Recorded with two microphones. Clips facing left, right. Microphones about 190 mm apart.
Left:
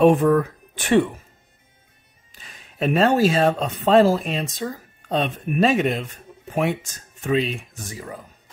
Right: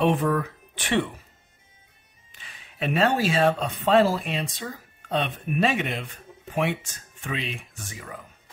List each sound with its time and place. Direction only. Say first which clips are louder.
0.0 s speech: left 7 dB; 45° left (ahead or behind)
2.3 s speech: left 8 dB; 40° left (ahead or behind)